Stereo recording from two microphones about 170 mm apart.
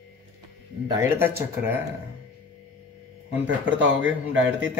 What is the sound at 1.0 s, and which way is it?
Speech, 15° right (ahead or behind).